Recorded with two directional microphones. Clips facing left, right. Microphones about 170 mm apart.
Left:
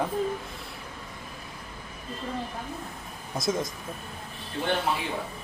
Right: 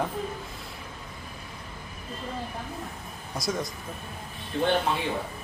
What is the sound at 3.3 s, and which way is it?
Speech, 25° left (ahead or behind).